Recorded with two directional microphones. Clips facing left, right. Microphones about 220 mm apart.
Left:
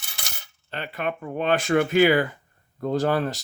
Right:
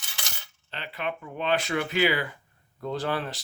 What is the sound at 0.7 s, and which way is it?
Speech, 50° left (ahead or behind).